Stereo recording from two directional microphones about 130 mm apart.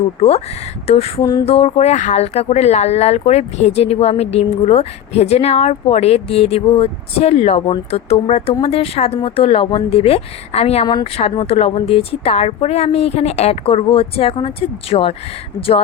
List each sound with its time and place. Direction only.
0.2 s speech: 50° left (ahead or behind)